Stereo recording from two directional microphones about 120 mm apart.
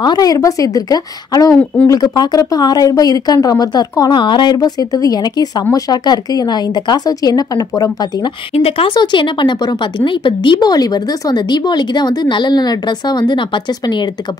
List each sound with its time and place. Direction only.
0.0 s speech: 35° left (ahead or behind)
8.5 s speech: 55° left (ahead or behind); by 14.0 s 40° left (ahead or behind)